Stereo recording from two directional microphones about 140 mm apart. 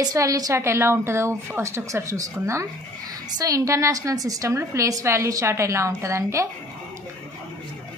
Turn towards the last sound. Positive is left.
turn(degrees=-20)  # may be behind; listen again after turning